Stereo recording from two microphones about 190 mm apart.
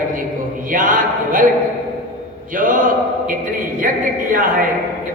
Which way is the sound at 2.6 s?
45° right (ahead or behind).